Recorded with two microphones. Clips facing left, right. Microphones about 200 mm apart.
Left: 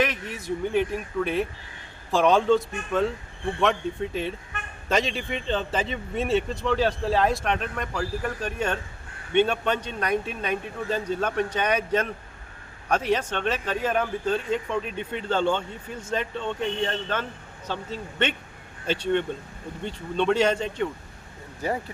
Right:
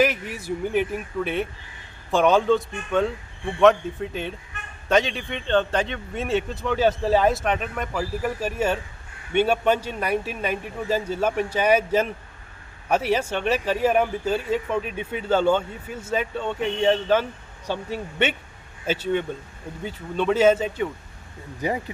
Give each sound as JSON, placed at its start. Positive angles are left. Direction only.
{"t": 0.0, "sound": "speech", "side_deg": -5}